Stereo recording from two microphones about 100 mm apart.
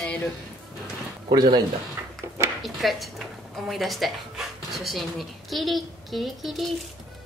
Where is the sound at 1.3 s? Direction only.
45° right (ahead or behind).